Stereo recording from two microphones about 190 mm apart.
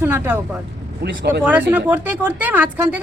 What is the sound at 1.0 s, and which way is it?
Speech, 60° right (ahead or behind).